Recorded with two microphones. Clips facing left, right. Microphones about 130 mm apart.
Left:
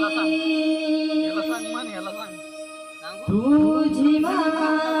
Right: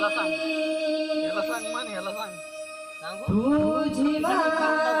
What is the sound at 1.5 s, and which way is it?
Music, centre (ahead or behind).